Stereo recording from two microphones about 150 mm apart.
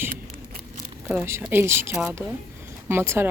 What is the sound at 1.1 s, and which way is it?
Speech, 15° right (ahead or behind).